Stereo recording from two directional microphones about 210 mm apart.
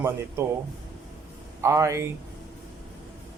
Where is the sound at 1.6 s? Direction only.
15° right (ahead or behind).